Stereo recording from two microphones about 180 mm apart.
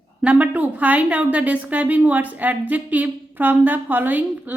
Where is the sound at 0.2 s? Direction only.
5° right (ahead or behind).